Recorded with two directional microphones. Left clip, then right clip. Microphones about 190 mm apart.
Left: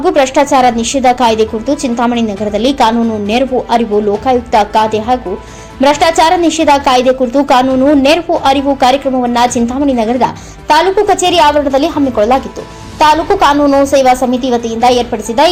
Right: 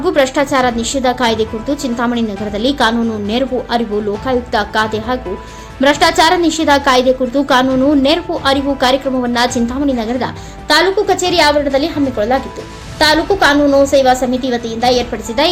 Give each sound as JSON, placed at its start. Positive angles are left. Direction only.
{"t": 0.0, "sound": "a woman's voice", "side_deg": 5}
{"t": 10.0, "sound": "a woman's voice", "side_deg": 10}
{"t": 13.4, "sound": "a woman's voice", "side_deg": 10}